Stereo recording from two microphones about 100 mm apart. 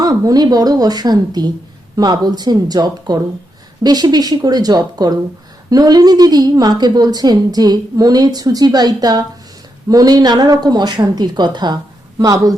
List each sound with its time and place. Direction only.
0.0 s a woman's voice: 40° right (ahead or behind)